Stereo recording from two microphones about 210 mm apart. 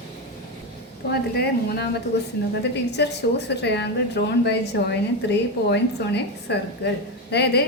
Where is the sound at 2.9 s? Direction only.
55° left (ahead or behind).